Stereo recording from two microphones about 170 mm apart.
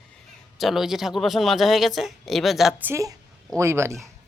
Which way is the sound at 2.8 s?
15° right (ahead or behind).